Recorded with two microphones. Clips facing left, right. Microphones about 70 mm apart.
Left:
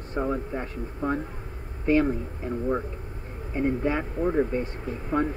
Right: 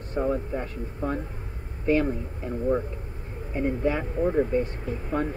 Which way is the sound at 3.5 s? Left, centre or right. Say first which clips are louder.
Even; centre.